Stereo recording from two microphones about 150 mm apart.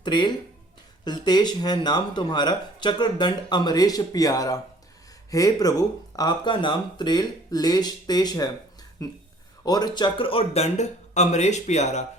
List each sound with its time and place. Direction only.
0.0 s speech: 30° left (ahead or behind); by 12.0 s 50° left (ahead or behind)